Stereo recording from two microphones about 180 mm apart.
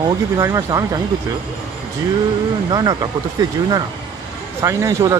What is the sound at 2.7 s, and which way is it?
Speech, 20° right (ahead or behind).